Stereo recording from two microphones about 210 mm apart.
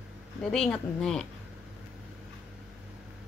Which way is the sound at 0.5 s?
Centre (ahead or behind).